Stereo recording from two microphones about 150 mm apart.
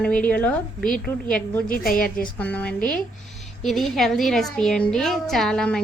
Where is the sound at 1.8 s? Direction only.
75° left (ahead or behind).